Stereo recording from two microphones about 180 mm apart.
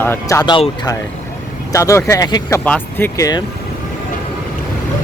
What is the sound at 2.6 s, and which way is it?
Speech, 10° left (ahead or behind).